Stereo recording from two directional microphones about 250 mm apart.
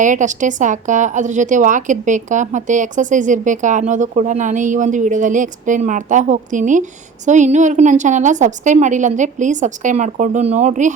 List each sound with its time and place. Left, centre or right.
0.0 s a woman's voice: right